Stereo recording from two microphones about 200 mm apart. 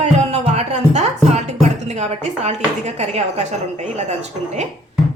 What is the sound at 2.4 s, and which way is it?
Speech, 35° right (ahead or behind).